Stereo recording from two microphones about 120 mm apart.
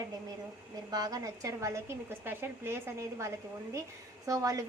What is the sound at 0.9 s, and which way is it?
A woman's voice, 30° right (ahead or behind).